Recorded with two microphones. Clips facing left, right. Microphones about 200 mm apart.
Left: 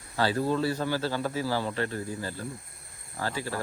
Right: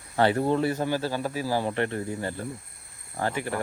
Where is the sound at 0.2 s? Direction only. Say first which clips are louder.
Right 4 dB; 25° right (ahead or behind).